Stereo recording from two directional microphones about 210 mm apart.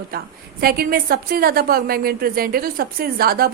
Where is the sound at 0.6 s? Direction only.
45° right (ahead or behind).